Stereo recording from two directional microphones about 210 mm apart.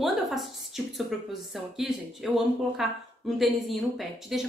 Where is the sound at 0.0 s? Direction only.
Centre (ahead or behind).